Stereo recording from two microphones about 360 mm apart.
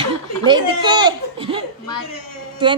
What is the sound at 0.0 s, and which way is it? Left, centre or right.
Laughter, centre.